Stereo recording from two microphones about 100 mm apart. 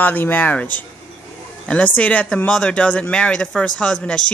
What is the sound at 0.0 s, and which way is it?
Speech, 20° left (ahead or behind).